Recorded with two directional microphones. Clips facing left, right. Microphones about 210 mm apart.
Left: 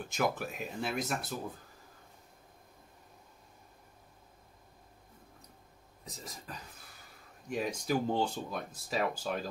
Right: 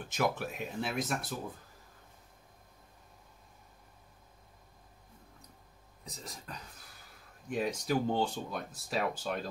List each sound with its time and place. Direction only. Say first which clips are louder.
0.1 s speech: right 1 dB; centre (ahead or behind)
6.0 s speech: even; centre (ahead or behind)